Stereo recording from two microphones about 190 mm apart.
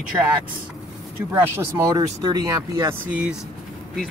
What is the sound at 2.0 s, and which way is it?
Speech, 20° right (ahead or behind).